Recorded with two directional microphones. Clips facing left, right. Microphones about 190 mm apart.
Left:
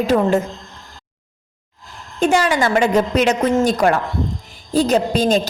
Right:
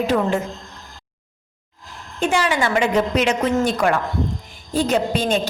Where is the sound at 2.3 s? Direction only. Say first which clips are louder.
Left 3 dB; 40° left (ahead or behind).